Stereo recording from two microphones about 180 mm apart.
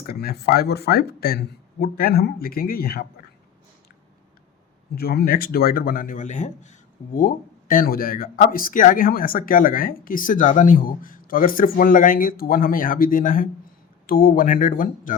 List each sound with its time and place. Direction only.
0.0 s speech: 55° left (ahead or behind)
4.9 s a man's voice: 60° left (ahead or behind)